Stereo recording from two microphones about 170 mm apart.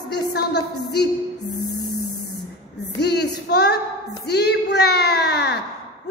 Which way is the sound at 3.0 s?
75° left (ahead or behind).